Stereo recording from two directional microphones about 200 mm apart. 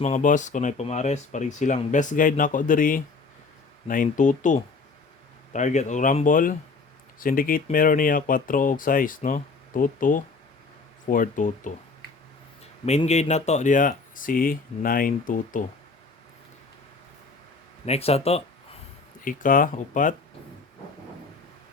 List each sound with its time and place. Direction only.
0.0 s speech: 40° left (ahead or behind)
12.8 s speech: 35° left (ahead or behind)
17.8 s speech: 30° left (ahead or behind)
19.2 s speech: 45° left (ahead or behind)